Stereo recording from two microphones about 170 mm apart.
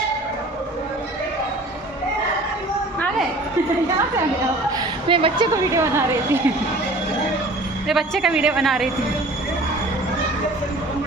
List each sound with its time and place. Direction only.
5.0 s a woman's voice: 30° right (ahead or behind)
5.5 s a woman's voice: 20° right (ahead or behind)
7.9 s a woman's voice: centre (ahead or behind)